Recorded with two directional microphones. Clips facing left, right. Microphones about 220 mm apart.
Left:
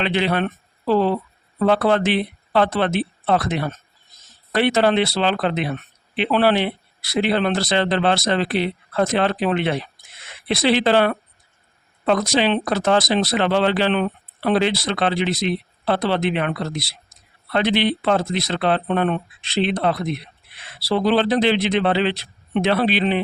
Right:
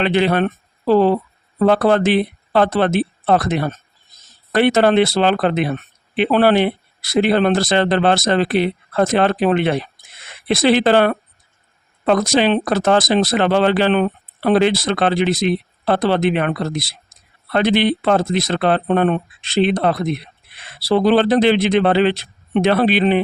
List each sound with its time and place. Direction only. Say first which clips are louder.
0.0 s speech: right 5 dB; 45° right (ahead or behind)